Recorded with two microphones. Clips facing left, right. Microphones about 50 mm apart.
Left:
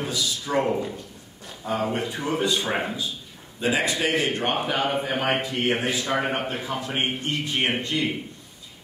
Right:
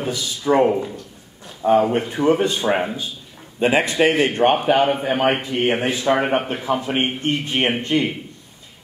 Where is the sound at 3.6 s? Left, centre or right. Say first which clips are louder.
Right 7 dB; right.